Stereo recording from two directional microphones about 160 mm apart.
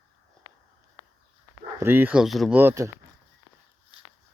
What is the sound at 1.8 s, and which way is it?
Speech, 15° right (ahead or behind).